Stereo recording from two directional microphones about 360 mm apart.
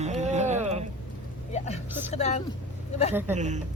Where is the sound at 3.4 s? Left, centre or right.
Centre.